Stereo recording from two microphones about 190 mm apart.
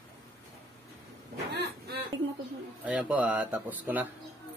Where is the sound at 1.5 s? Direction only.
65° right (ahead or behind).